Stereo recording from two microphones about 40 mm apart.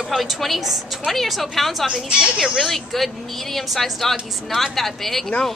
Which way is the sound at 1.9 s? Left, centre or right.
Right.